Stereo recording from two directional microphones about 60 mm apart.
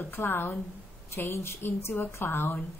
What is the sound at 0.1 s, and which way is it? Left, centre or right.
A woman's voice, left.